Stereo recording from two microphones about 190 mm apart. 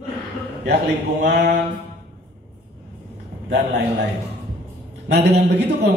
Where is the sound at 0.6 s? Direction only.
60° right (ahead or behind).